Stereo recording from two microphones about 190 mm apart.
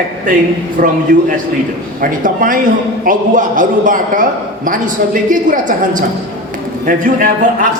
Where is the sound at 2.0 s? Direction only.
45° right (ahead or behind).